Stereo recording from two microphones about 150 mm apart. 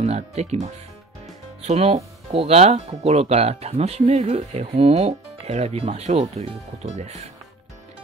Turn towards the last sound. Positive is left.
turn(degrees=-50)  # may be behind; listen again after turning